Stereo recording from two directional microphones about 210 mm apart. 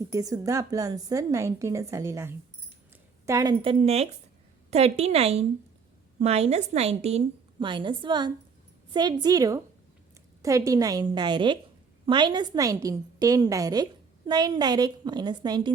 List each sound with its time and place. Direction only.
0.1 s a woman's voice: 15° right (ahead or behind)